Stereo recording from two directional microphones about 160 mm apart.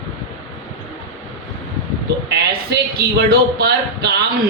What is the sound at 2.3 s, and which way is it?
A man's voice, 85° right.